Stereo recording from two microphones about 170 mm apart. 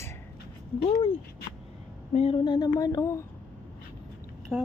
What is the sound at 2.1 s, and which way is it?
Speech, 35° left (ahead or behind).